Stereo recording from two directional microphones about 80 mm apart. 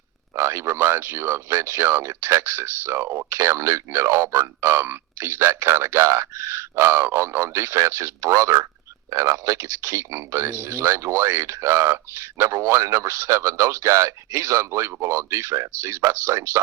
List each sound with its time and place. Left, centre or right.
0.3 s speech: right